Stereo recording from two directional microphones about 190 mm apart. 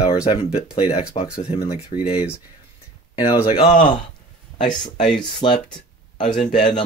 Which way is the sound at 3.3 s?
20° left (ahead or behind).